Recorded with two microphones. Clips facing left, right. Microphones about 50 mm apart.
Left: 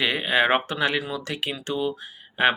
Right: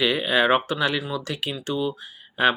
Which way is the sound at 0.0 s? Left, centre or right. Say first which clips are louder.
Right 1 dB; left.